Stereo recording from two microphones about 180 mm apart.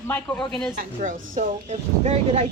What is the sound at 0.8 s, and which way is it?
A woman's voice, 45° right (ahead or behind).